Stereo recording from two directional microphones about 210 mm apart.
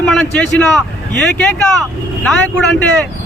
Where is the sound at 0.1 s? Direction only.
5° left (ahead or behind).